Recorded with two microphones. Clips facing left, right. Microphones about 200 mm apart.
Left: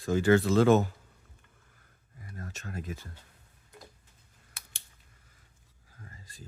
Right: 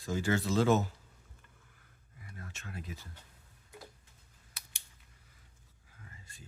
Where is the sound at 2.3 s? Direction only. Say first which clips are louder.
Left 6 dB; 40° left (ahead or behind).